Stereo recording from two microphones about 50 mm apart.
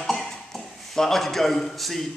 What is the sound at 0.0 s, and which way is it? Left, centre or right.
A man's voice, centre.